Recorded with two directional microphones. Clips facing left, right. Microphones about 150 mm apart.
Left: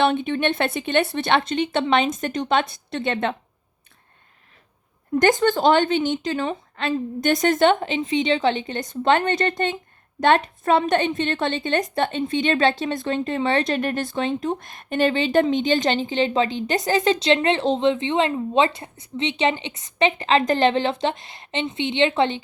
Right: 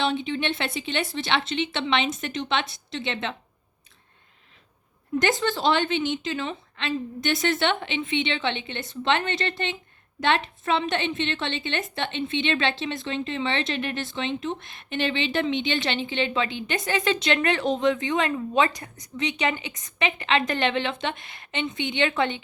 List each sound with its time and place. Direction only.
0.0 s a woman's voice: 55° left (ahead or behind)
5.1 s a woman's voice: 45° left (ahead or behind); by 22.4 s 30° left (ahead or behind)